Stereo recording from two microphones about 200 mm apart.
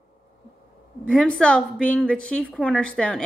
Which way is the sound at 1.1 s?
5° left (ahead or behind).